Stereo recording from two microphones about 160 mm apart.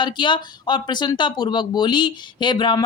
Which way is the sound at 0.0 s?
30° left (ahead or behind).